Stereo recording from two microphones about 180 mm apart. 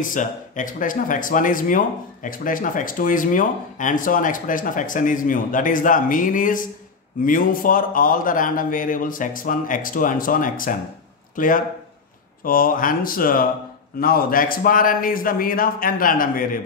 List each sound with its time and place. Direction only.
0.0 s speech: 45° left (ahead or behind)